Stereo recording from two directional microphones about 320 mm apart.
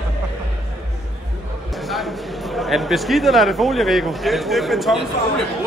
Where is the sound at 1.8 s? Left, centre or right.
Centre.